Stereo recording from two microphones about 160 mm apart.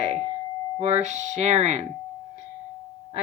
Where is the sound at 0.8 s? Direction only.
45° right (ahead or behind).